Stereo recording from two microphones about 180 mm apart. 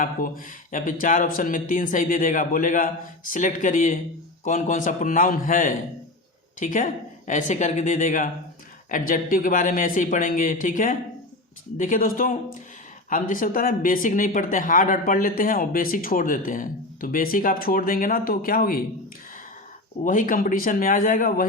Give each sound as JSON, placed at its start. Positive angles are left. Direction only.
{"t": 0.0, "sound": "speech", "side_deg": 50}
{"t": 20.1, "sound": "speech", "side_deg": 50}